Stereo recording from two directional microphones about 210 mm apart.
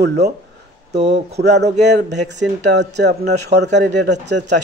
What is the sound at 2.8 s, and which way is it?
A man's voice, 55° right (ahead or behind).